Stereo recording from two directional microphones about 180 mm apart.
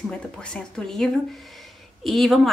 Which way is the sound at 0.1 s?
5° left (ahead or behind).